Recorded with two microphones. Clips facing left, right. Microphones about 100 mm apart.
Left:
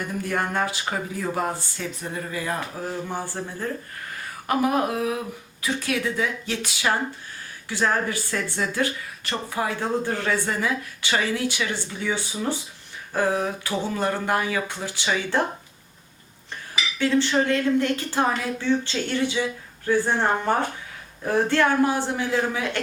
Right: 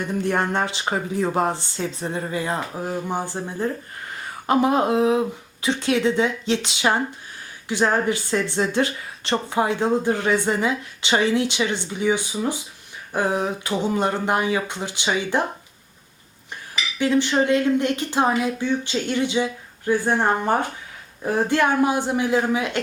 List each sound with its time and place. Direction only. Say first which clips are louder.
0.1 s speech: right 5 dB; 25° right (ahead or behind)
17.0 s a woman's voice: right 2 dB; 15° right (ahead or behind)